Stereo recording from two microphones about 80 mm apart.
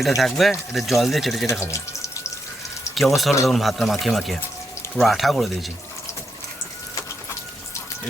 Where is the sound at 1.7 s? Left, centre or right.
Left.